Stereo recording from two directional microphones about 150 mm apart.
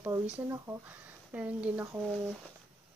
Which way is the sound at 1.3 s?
10° right (ahead or behind).